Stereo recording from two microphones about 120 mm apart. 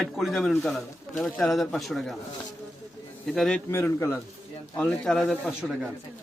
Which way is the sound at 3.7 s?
20° left (ahead or behind).